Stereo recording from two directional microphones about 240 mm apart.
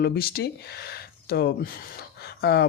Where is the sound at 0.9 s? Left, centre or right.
Left.